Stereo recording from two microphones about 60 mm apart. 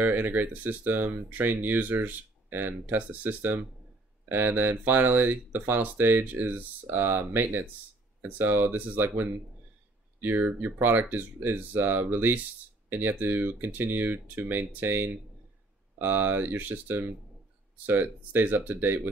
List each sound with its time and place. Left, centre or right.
0.0 s speech: right